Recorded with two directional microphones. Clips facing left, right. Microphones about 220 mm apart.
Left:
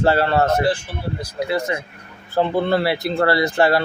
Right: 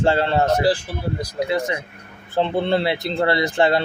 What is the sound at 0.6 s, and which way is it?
Speech, 35° right (ahead or behind).